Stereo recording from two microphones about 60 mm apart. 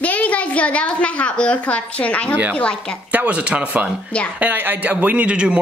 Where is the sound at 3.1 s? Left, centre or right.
Right.